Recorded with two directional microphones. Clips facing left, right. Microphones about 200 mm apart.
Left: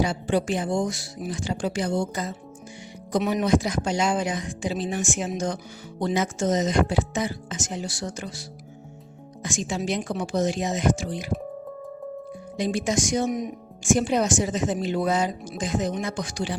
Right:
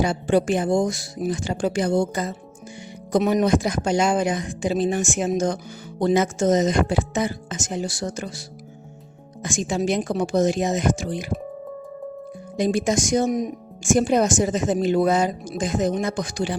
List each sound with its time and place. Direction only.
0.0 s speech: 50° right (ahead or behind)
9.4 s speech: 50° right (ahead or behind)
12.5 s speech: 45° right (ahead or behind)